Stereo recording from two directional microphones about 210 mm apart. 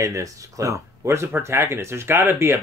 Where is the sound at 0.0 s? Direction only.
15° right (ahead or behind).